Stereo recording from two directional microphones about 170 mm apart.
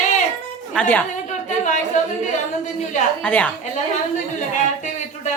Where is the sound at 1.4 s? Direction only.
45° left (ahead or behind).